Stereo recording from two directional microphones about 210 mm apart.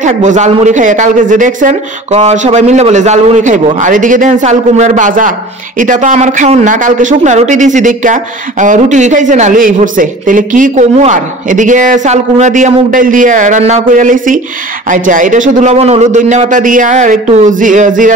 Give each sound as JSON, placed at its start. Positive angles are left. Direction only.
{"t": 0.0, "sound": "speech", "side_deg": -35}